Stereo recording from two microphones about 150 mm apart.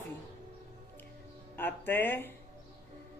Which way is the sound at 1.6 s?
10° left (ahead or behind).